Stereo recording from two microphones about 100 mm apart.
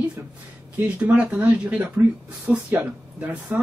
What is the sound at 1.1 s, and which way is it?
Speech, 15° right (ahead or behind).